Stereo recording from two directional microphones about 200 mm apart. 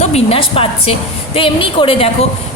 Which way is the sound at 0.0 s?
30° left (ahead or behind).